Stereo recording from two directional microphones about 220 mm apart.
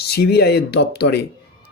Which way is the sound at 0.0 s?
45° left (ahead or behind).